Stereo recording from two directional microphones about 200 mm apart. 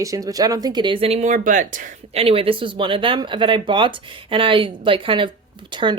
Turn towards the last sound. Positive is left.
turn(degrees=-25)  # may be behind; listen again after turning